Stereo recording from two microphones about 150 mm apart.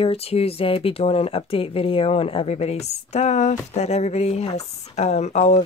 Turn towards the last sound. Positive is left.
turn(degrees=50)  # may be behind; listen again after turning